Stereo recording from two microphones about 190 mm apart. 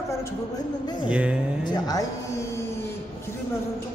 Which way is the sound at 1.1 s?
5° right (ahead or behind).